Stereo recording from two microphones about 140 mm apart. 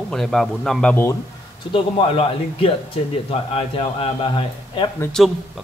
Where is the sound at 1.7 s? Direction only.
45° left (ahead or behind).